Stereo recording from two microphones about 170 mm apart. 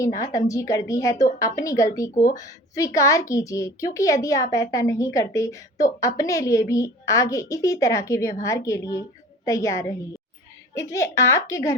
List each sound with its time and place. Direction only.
0.0 s a woman's voice: 20° left (ahead or behind)